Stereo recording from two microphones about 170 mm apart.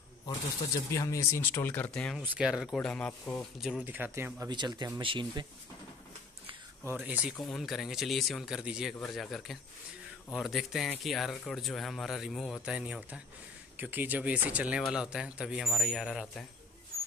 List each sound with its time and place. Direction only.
0.9 s speech: 20° left (ahead or behind)
2.2 s speech: 5° right (ahead or behind)
3.6 s speech: 5° right (ahead or behind)
4.5 s speech: 25° right (ahead or behind)
6.8 s speech: 10° right (ahead or behind)